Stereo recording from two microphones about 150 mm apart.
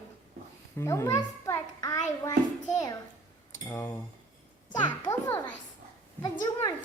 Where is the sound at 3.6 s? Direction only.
15° left (ahead or behind).